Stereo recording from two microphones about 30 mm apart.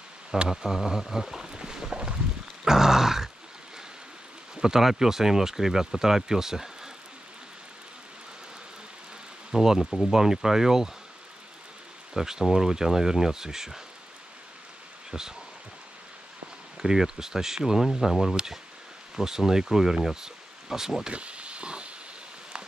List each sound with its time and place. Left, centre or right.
0.5 s speech: centre
1.1 s a sound: centre
2.6 s grunt: centre
4.6 s speech: centre
9.5 s speech: centre
9.8 s speech: left
10.1 s speech: centre
12.1 s speech: centre
15.0 s speech: centre
16.7 s speech: centre
17.8 s speech: centre
19.1 s speech: centre
21.1 s a sound: right